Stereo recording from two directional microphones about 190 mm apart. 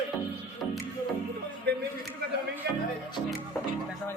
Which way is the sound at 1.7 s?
60° right (ahead or behind).